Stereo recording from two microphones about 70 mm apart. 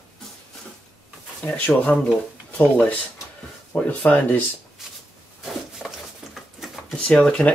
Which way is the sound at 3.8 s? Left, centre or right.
Left.